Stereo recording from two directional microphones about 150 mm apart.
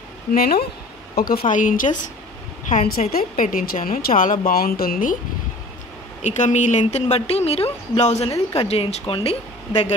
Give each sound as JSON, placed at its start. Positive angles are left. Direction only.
{"t": 0.3, "sound": "speech", "side_deg": 85}
{"t": 1.5, "sound": "a woman's voice", "side_deg": 60}
{"t": 2.7, "sound": "a woman's voice", "side_deg": 50}
{"t": 3.1, "sound": "a woman's voice", "side_deg": 70}
{"t": 4.5, "sound": "speech", "side_deg": 85}
{"t": 6.2, "sound": "a woman's voice", "side_deg": 50}